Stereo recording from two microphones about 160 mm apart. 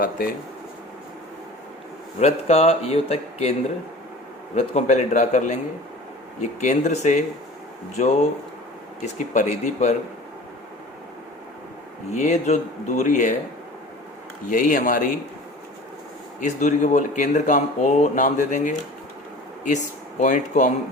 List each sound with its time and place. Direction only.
2.1 s a man's voice: 40° left (ahead or behind)
4.5 s speech: 45° left (ahead or behind)
12.1 s speech: 45° left (ahead or behind)
14.5 s speech: 55° left (ahead or behind)
16.4 s speech: 50° left (ahead or behind)